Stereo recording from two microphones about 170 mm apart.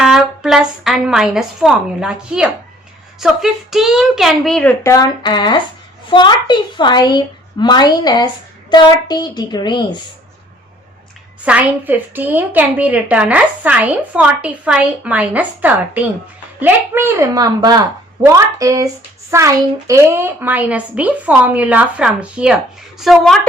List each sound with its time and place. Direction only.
0.0 s a woman's voice: 5° right (ahead or behind)
4.8 s a woman's voice: 20° left (ahead or behind)
11.4 s a woman's voice: 10° right (ahead or behind)